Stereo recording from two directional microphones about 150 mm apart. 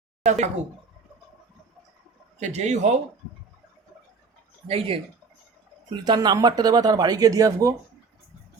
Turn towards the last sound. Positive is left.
turn(degrees=-20)  # may be behind; listen again after turning